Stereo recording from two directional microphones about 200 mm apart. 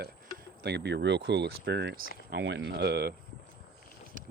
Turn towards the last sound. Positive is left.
turn(degrees=-40)  # may be behind; listen again after turning